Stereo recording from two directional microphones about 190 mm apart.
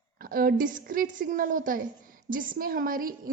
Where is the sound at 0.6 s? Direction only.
45° right (ahead or behind).